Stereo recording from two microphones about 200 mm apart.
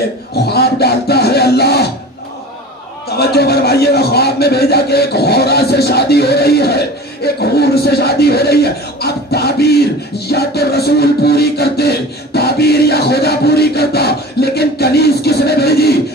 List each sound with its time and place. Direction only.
0.5 s music: 55° left (ahead or behind)
3.2 s a man's voice: 50° left (ahead or behind)
7.3 s a sound: 50° left (ahead or behind)
12.4 s music: 50° left (ahead or behind)